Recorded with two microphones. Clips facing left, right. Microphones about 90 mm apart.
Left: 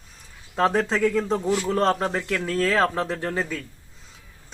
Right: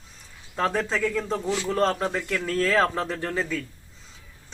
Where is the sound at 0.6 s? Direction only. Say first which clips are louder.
Left 4 dB; 15° left (ahead or behind).